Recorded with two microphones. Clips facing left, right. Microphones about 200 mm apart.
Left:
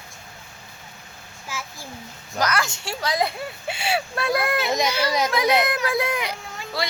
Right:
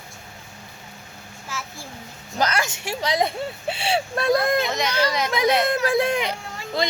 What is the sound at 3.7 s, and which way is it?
Speech, 30° right (ahead or behind).